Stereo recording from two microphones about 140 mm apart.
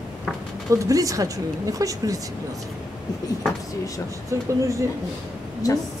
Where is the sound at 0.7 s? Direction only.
25° right (ahead or behind).